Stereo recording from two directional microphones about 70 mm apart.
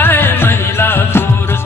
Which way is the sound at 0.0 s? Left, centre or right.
Left.